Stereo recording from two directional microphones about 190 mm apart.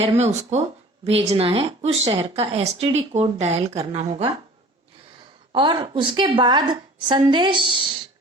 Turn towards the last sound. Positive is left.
turn(degrees=-25)  # may be behind; listen again after turning